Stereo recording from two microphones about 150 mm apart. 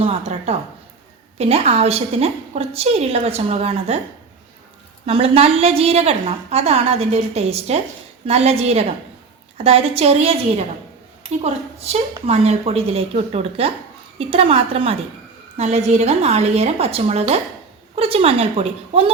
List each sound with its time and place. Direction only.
0.0 s a woman's voice: 45° right (ahead or behind)
5.0 s a woman's voice: 40° right (ahead or behind)